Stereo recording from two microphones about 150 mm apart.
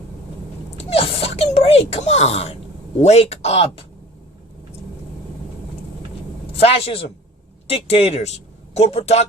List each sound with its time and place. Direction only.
0.8 s speech: 40° left (ahead or behind)
6.6 s a man's voice: 40° left (ahead or behind)